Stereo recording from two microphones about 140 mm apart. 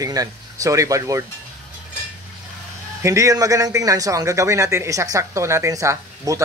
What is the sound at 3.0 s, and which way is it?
Speech, 20° right (ahead or behind).